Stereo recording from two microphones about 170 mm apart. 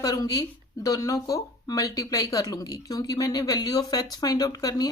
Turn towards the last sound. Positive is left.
turn(degrees=20)  # may be behind; listen again after turning